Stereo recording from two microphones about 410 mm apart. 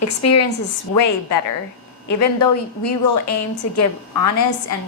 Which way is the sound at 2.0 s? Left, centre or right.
Left.